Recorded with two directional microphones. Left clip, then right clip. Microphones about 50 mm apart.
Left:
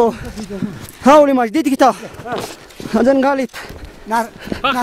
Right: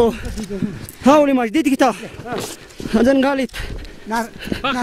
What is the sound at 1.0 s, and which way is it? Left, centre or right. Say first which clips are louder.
Speech: left 4 dB; left.